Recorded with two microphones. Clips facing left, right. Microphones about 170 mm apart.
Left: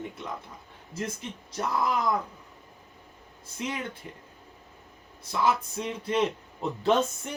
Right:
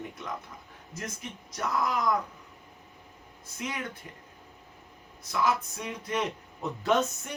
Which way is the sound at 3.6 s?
25° left (ahead or behind).